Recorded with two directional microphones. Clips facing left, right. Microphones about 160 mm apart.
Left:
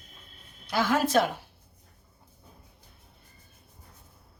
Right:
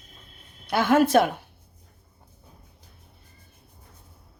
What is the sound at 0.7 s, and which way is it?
Speech, 60° right (ahead or behind).